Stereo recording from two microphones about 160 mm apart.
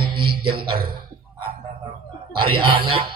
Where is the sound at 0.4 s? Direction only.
30° right (ahead or behind).